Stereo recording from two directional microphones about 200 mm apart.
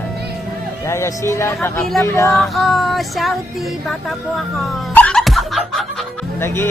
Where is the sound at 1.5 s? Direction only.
Centre (ahead or behind).